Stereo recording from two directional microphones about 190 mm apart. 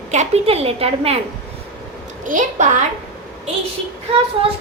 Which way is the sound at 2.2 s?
40° right (ahead or behind).